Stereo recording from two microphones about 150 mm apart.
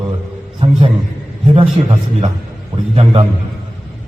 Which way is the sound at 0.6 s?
40° right (ahead or behind).